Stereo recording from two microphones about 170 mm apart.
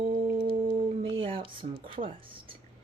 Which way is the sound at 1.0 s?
30° right (ahead or behind).